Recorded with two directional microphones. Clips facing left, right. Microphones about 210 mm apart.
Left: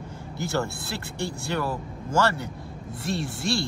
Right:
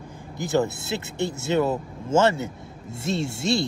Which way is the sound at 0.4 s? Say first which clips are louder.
Right 5 dB; 15° right (ahead or behind).